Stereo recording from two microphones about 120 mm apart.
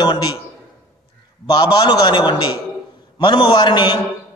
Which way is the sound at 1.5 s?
40° left (ahead or behind).